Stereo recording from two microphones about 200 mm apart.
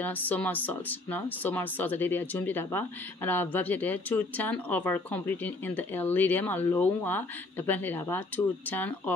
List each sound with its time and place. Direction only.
0.0 s speech: 10° left (ahead or behind)